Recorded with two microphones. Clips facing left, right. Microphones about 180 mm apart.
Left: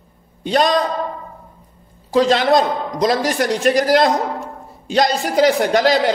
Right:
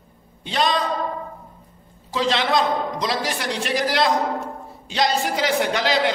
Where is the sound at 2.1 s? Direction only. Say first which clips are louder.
Left 7 dB; 45° left (ahead or behind).